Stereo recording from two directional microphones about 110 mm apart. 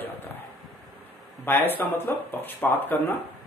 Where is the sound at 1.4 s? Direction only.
20° left (ahead or behind).